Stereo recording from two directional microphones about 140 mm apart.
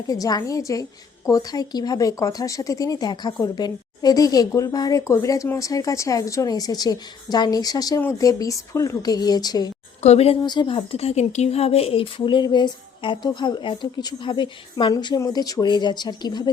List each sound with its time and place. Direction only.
0.1 s a woman's voice: 25° left (ahead or behind)
10.0 s speech: 50° left (ahead or behind)
10.4 s speech: 30° left (ahead or behind)